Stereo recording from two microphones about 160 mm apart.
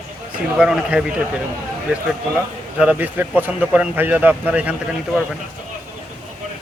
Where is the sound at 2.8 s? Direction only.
10° right (ahead or behind).